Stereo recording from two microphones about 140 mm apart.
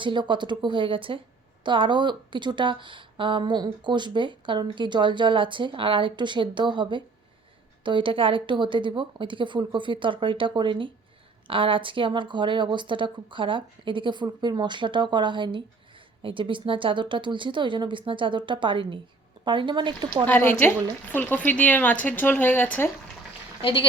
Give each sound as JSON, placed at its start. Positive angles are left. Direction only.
{"t": 0.0, "sound": "speech", "side_deg": -35}
{"t": 20.2, "sound": "a woman's voice", "side_deg": 15}